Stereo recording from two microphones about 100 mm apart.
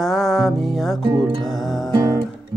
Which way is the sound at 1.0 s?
55° right (ahead or behind).